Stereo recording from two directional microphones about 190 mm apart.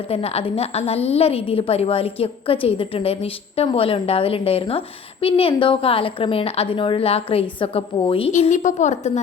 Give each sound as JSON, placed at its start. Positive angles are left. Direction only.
{"t": 0.1, "sound": "a woman's voice", "side_deg": 30}
{"t": 8.3, "sound": "a woman's voice", "side_deg": 40}